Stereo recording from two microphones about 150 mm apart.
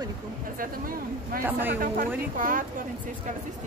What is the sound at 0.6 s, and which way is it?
A woman's voice, 70° right (ahead or behind).